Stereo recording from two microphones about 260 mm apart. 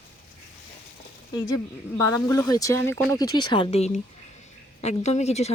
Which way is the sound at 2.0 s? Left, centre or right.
Centre.